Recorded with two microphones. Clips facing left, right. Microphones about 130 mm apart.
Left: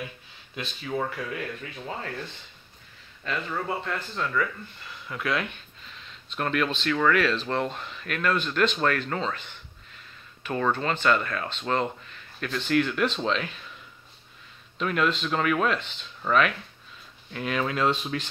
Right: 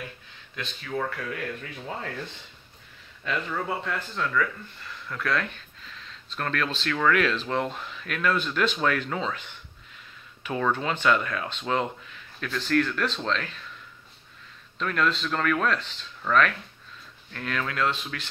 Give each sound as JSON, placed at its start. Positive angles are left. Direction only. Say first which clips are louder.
{"t": 0.8, "sound": "speech", "louder": "left 1 dB", "side_deg": 15}
{"t": 1.3, "sound": "speech", "louder": "even", "side_deg": 5}
{"t": 3.3, "sound": "speech", "louder": "right 1 dB", "side_deg": 0}
{"t": 12.8, "sound": "speech", "louder": "left 3 dB", "side_deg": 10}
{"t": 14.8, "sound": "speech", "louder": "left 1 dB", "side_deg": 10}